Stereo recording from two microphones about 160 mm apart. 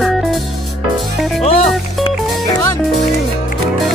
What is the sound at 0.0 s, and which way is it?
Music, centre (ahead or behind).